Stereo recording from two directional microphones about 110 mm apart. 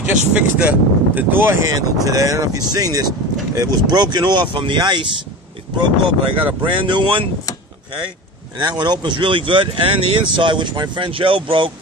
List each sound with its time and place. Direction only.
0.3 s speech: 10° right (ahead or behind)
1.8 s speech: 30° right (ahead or behind); by 7.2 s 50° right (ahead or behind)
8.5 s speech: 45° right (ahead or behind)